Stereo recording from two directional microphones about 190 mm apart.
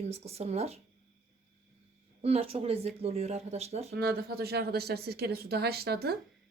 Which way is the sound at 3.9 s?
55° right (ahead or behind).